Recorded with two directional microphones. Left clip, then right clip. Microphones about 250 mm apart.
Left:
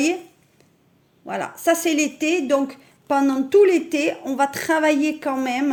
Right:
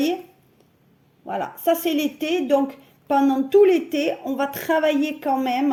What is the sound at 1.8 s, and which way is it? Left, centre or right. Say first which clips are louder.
Speech: left 2 dB; left.